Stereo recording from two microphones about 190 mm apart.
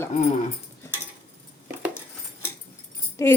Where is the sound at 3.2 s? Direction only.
15° left (ahead or behind).